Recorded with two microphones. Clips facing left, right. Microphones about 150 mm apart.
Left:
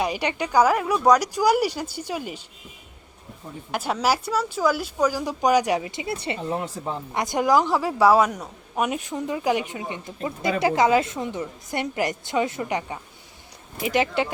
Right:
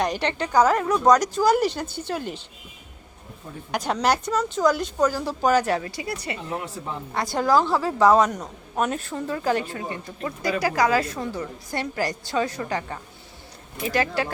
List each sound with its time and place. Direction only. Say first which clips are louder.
0.0 s a woman's voice: even; 10° left (ahead or behind)
3.7 s a woman's voice: right 1 dB; 5° left (ahead or behind); by 14.3 s 20° left (ahead or behind)